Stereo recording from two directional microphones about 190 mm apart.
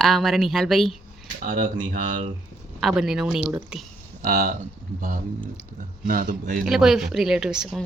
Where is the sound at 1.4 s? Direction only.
45° right (ahead or behind).